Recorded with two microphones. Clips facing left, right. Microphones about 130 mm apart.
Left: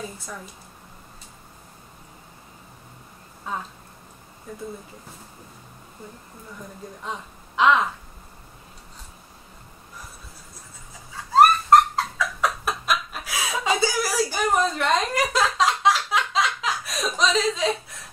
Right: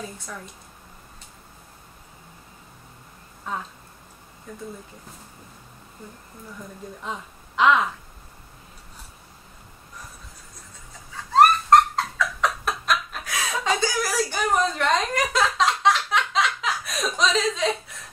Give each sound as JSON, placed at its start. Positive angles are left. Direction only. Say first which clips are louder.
{"t": 0.0, "sound": "a woman's voice", "louder": "left 1 dB", "side_deg": 0}
{"t": 3.5, "sound": "a woman's voice", "louder": "even", "side_deg": 0}
{"t": 7.0, "sound": "speech", "louder": "left 1 dB", "side_deg": 0}
{"t": 11.1, "sound": "laughter", "louder": "left 1 dB", "side_deg": 5}